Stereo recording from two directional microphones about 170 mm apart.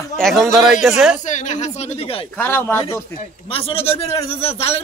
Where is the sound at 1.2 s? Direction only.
45° left (ahead or behind).